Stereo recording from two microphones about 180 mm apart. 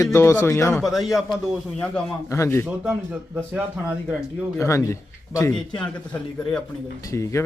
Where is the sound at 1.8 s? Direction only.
10° left (ahead or behind).